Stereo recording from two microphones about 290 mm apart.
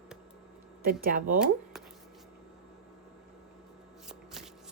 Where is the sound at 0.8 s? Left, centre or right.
Right.